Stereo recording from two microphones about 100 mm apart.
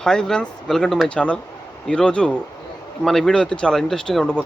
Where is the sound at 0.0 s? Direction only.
5° left (ahead or behind).